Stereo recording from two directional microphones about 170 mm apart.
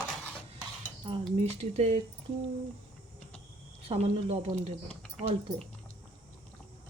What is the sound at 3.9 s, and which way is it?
Speech, 40° right (ahead or behind).